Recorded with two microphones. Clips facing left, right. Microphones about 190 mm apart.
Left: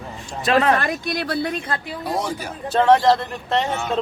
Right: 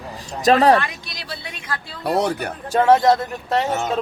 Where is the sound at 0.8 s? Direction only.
50° left (ahead or behind).